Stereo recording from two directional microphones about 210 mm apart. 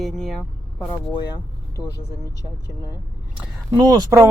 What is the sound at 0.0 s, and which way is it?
Speech, centre (ahead or behind).